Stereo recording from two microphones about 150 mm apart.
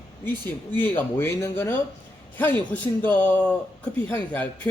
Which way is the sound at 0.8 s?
15° left (ahead or behind).